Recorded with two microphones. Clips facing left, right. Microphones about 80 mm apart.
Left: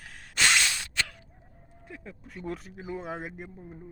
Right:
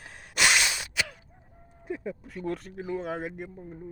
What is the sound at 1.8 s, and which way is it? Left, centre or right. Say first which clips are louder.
Speech: right 10 dB; centre.